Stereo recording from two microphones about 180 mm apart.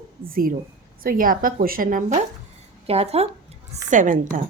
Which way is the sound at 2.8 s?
35° right (ahead or behind).